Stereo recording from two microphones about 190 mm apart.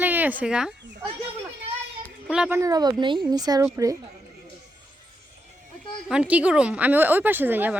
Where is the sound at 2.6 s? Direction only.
20° right (ahead or behind).